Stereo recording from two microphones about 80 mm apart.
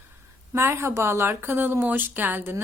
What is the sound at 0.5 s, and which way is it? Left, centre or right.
Speech, right.